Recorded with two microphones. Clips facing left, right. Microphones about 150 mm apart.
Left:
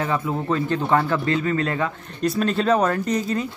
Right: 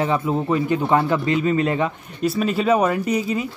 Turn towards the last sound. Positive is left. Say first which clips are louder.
# right 1 dB
turn(degrees=-10)  # may be behind; listen again after turning